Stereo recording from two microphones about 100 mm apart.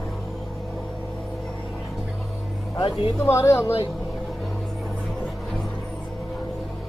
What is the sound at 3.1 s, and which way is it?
Speech, 30° left (ahead or behind).